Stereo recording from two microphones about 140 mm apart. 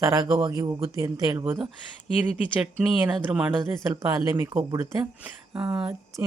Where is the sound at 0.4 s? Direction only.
25° right (ahead or behind).